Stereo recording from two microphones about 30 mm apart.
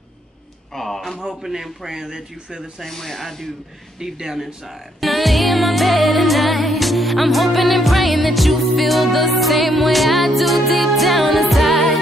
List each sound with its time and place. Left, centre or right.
0.7 s speech: centre
1.2 s speech: centre
2.9 s speech: centre
4.0 s speech: centre
4.6 s music: centre